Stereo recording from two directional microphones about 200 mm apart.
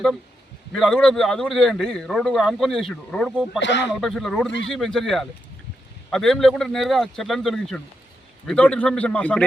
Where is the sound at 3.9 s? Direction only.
Centre (ahead or behind).